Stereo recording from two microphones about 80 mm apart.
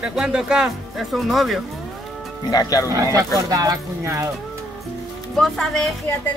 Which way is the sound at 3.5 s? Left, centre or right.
Right.